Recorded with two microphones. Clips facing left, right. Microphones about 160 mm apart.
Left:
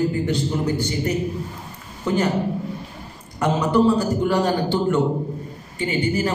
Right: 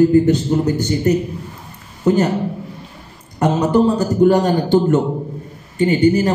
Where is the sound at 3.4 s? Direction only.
40° right (ahead or behind).